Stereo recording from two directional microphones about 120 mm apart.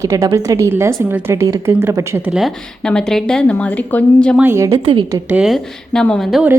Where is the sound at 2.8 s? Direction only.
5° left (ahead or behind).